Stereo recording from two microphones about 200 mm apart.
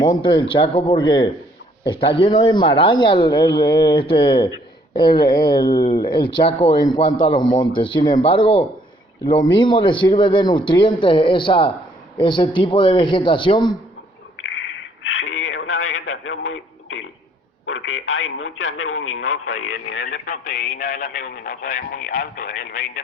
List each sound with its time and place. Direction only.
0.0 s a man's voice: 25° left (ahead or behind)
14.4 s a sound: 75° left (ahead or behind)
17.7 s speech: 85° left; by 20.3 s 60° left (ahead or behind)
20.3 s speech: 45° left (ahead or behind)